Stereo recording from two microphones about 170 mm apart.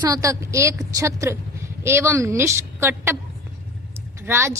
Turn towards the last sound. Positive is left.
turn(degrees=-15)  # may be behind; listen again after turning